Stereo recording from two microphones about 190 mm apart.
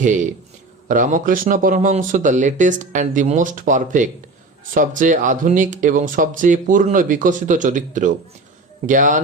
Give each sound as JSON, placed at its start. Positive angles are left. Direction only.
{"t": 0.0, "sound": "a man's voice", "side_deg": -40}